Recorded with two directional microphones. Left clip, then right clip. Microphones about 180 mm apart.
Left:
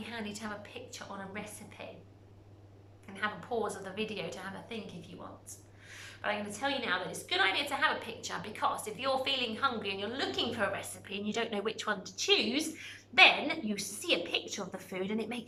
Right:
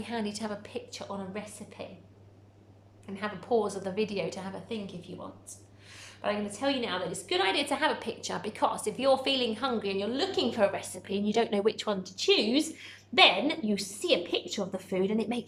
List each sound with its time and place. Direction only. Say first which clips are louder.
0.0 s a woman's voice: right 6 dB; 30° right (ahead or behind)
3.2 s a woman's voice: right 5 dB; 30° right (ahead or behind)